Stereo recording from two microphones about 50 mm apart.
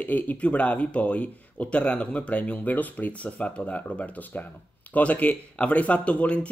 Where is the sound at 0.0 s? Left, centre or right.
Left.